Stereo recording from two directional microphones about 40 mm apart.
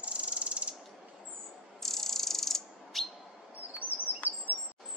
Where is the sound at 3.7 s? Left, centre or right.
Right.